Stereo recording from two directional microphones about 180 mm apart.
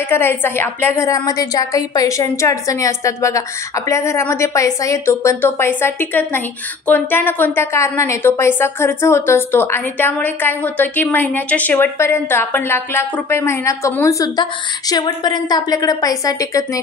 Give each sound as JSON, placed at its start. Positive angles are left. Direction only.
{"t": 0.1, "sound": "a woman's voice", "side_deg": 10}